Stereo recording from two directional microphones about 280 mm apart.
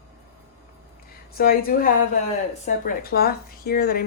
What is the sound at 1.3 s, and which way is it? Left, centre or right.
Speech, left.